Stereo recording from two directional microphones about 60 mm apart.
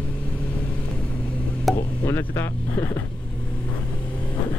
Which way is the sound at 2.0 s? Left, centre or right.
Left.